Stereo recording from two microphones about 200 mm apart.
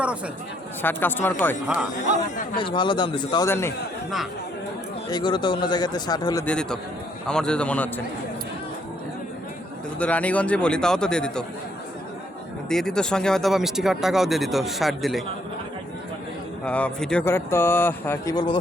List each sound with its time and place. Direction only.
0.8 s speech: 10° left (ahead or behind)
1.6 s speech: 5° right (ahead or behind)
2.6 s speech: 25° left (ahead or behind)
5.0 s speech: 20° left (ahead or behind)
6.4 s speech: 5° left (ahead or behind)
10.0 s speech: 5° left (ahead or behind)
12.6 s speech: 5° left (ahead or behind)
16.6 s speech: 5° left (ahead or behind)